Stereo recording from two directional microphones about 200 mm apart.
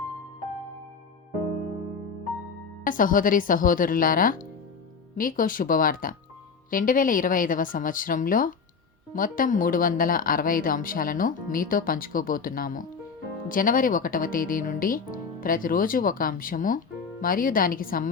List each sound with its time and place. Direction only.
2.8 s speech: 45° left (ahead or behind)